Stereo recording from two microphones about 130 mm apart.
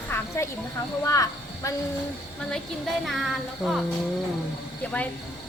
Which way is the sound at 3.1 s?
Centre (ahead or behind).